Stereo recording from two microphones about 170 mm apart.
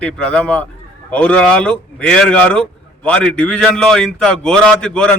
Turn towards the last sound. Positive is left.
turn(degrees=5)  # may be behind; listen again after turning